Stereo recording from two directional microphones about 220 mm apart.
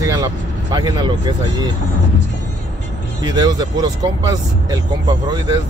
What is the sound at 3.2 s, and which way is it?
Speech, 15° right (ahead or behind).